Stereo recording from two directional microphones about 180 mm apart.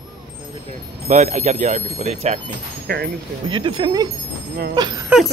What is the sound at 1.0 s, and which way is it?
Speech, 40° right (ahead or behind).